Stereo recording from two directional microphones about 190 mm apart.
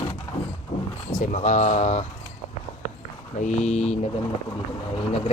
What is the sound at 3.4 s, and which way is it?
Speech, 35° left (ahead or behind).